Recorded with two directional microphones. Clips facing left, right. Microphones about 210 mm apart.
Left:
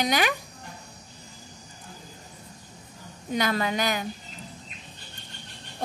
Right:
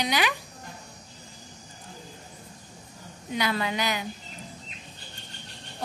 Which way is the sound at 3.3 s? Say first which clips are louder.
Left 2 dB; 45° left (ahead or behind).